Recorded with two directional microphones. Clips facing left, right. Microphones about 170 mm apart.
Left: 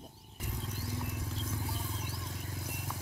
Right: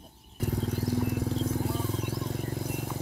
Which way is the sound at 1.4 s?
60° right (ahead or behind).